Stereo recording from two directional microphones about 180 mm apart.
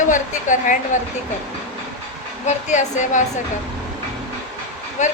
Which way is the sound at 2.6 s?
40° left (ahead or behind).